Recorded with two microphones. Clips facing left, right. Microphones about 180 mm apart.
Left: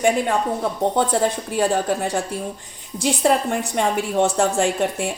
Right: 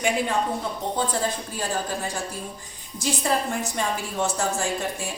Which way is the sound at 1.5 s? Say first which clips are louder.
Left 9 dB; 65° left (ahead or behind).